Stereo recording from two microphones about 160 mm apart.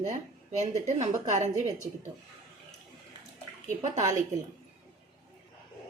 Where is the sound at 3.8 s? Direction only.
45° right (ahead or behind).